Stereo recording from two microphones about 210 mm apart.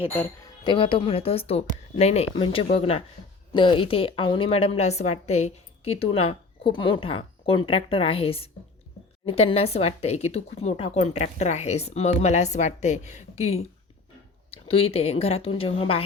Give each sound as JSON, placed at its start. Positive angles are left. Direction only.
{"t": 0.6, "sound": "a woman's voice", "side_deg": 25}